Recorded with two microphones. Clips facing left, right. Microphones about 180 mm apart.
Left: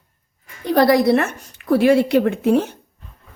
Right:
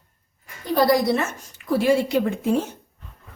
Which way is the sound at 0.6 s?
70° left (ahead or behind).